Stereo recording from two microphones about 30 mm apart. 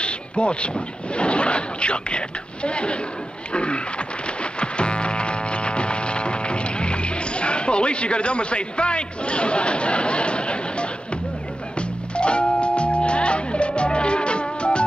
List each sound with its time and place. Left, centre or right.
0.0 s speech: left
3.5 s a sound: left
4.4 s music: left
12.2 s music: left